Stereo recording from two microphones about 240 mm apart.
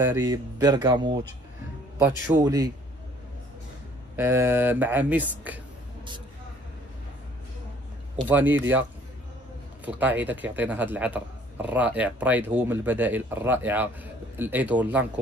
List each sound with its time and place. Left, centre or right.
0.0 s speech: centre
4.2 s speech: centre
8.3 s speech: centre
9.8 s speech: centre